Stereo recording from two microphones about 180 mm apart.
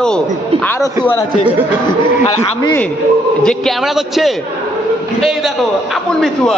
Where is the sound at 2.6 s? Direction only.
15° left (ahead or behind).